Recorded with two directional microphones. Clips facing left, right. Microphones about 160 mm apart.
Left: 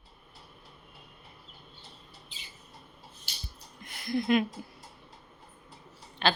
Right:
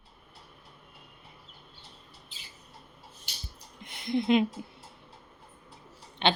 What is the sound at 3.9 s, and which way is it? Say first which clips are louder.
Speech: right 2 dB; 20° right (ahead or behind).